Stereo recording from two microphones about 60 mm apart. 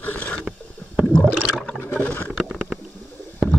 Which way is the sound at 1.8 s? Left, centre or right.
Left.